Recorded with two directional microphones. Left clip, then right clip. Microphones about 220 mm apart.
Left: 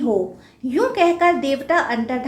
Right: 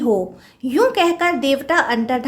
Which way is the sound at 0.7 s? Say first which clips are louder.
Right 2 dB; 45° right (ahead or behind).